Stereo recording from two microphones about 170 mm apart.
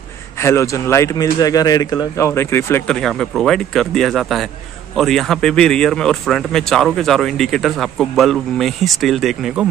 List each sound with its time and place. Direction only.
0.4 s a man's voice: 15° left (ahead or behind)
3.0 s a man's voice: 5° left (ahead or behind)